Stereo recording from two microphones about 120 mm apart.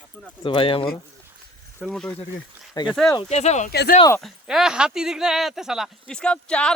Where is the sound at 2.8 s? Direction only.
35° left (ahead or behind).